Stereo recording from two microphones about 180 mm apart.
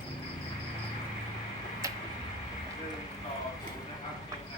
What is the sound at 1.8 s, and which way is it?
Tick-tock, 15° right (ahead or behind).